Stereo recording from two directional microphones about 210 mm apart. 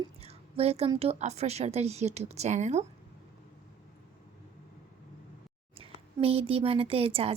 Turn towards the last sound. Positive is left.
turn(degrees=-25)  # may be behind; listen again after turning